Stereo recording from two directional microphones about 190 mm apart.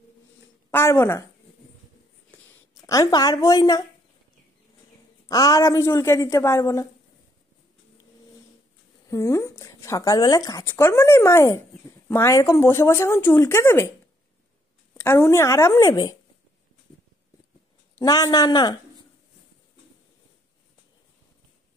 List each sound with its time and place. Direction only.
0.7 s speech: 10° left (ahead or behind)
2.9 s speech: 20° left (ahead or behind)
5.3 s speech: 20° left (ahead or behind)
9.1 s speech: 15° left (ahead or behind)
15.0 s speech: 10° left (ahead or behind)
17.9 s speech: 15° left (ahead or behind)